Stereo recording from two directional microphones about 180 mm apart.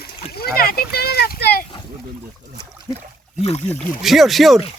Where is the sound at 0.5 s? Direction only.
55° left (ahead or behind).